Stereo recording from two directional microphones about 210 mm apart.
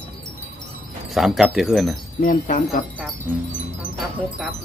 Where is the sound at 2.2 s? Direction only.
40° left (ahead or behind).